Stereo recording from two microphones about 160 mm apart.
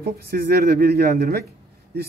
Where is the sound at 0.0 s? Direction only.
70° right (ahead or behind).